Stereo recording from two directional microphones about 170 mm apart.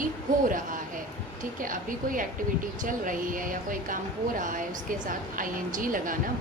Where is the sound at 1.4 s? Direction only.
55° right (ahead or behind).